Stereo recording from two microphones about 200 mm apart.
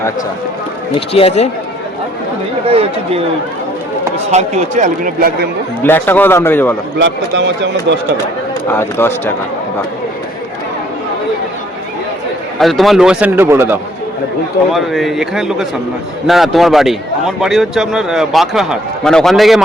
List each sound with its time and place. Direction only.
0.9 s speech: 30° left (ahead or behind)
2.6 s speech: 30° right (ahead or behind)
4.3 s a man's voice: 35° right (ahead or behind)
5.8 s a man's voice: 10° left (ahead or behind)
7.0 s speech: 60° right (ahead or behind)
8.7 s a man's voice: 10° left (ahead or behind)
12.5 s a man's voice: centre (ahead or behind)
14.7 s a man's voice: centre (ahead or behind)